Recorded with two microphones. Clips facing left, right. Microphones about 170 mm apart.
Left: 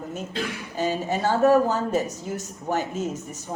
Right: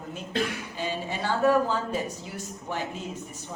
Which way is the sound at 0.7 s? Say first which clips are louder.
Left 9 dB; 45° left (ahead or behind).